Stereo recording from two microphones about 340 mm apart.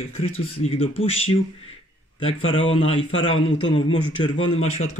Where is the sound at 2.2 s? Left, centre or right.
Centre.